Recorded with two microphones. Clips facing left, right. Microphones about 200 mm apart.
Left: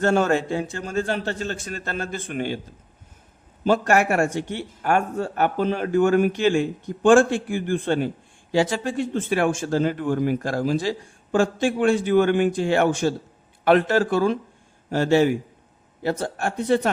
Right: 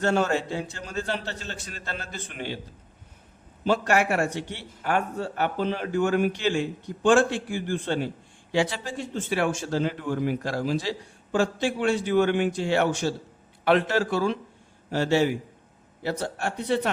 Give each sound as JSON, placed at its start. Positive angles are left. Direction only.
{"t": 0.0, "sound": "speech", "side_deg": 50}
{"t": 3.6, "sound": "a man's voice", "side_deg": 50}